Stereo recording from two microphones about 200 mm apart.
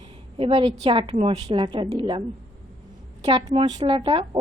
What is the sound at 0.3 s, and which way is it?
A woman's voice, 25° right (ahead or behind).